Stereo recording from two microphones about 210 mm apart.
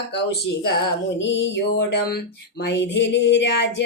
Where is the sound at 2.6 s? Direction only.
60° left (ahead or behind).